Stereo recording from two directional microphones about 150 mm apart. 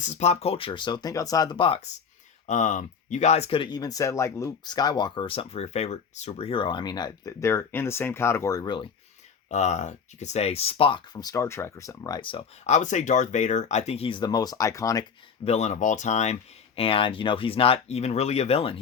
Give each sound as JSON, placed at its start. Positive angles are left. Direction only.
{"t": 0.0, "sound": "speech", "side_deg": 50}
{"t": 2.5, "sound": "speech", "side_deg": 55}
{"t": 9.5, "sound": "speech", "side_deg": 50}
{"t": 15.4, "sound": "speech", "side_deg": 50}